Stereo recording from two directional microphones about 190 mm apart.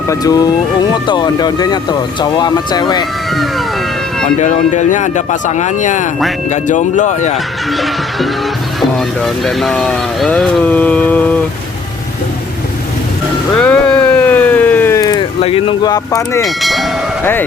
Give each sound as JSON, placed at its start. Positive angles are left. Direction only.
{"t": 0.1, "sound": "speech", "side_deg": 20}
{"t": 4.4, "sound": "speech", "side_deg": 40}
{"t": 7.7, "sound": "music", "side_deg": 0}
{"t": 8.8, "sound": "speech", "side_deg": 0}
{"t": 13.5, "sound": "a sound", "side_deg": 5}
{"t": 15.4, "sound": "speech", "side_deg": 30}
{"t": 16.4, "sound": "speech", "side_deg": 0}